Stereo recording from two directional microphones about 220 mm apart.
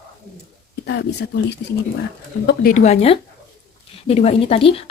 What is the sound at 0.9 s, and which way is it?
Speech, 50° left (ahead or behind).